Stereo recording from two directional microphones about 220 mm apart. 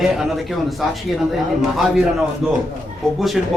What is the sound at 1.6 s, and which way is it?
Speech, centre (ahead or behind).